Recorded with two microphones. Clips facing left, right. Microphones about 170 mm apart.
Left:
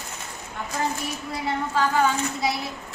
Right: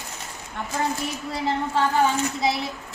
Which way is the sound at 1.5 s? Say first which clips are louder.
Right 1 dB; 25° right (ahead or behind).